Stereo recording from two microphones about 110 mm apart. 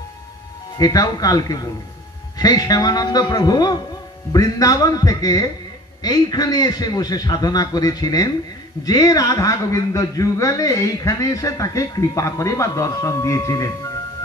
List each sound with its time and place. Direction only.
0.7 s a man's voice: 35° left (ahead or behind)